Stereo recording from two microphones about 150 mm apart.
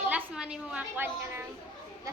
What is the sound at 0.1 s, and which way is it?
A woman's voice, 10° right (ahead or behind).